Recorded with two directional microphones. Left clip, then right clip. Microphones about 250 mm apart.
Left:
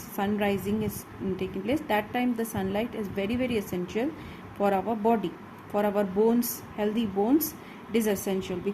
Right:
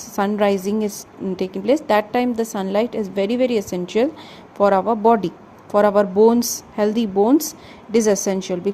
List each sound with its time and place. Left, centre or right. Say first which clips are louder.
0.2 s a woman's voice: right 10 dB; right